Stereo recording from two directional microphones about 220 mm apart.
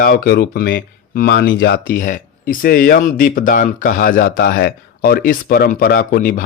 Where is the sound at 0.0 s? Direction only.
40° left (ahead or behind).